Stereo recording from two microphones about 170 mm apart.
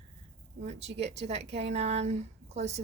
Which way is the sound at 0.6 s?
40° right (ahead or behind).